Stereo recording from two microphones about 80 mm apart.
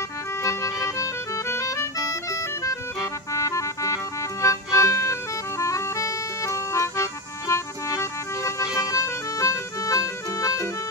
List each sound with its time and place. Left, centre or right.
0.4 s music: left